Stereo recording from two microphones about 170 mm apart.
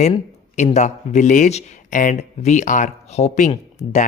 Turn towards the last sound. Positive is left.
turn(degrees=45)  # may be behind; listen again after turning